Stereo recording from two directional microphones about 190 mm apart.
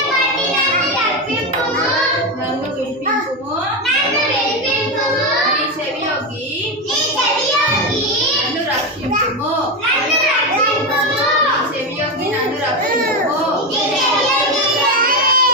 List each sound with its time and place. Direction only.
14.9 s child singing: 50° right (ahead or behind)